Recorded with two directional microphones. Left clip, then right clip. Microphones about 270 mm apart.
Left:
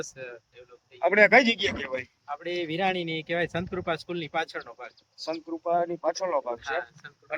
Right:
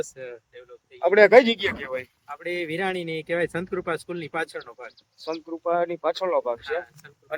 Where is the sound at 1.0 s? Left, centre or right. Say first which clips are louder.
Right 4 dB; centre.